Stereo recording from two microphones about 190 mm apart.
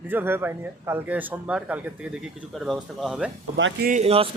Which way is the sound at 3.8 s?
35° right (ahead or behind).